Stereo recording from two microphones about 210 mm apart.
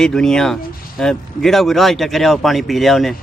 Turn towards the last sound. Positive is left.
turn(degrees=0)  # may be behind; listen again after turning